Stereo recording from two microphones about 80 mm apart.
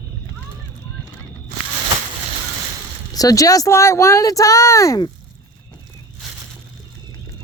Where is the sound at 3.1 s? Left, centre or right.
Left.